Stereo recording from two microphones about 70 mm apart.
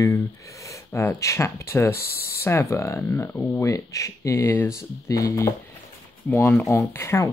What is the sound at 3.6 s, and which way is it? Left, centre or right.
Speech, left.